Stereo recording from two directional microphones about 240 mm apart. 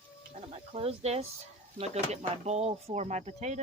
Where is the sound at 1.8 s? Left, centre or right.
Right.